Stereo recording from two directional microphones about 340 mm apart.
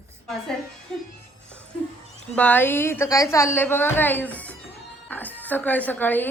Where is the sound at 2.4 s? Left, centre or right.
Centre.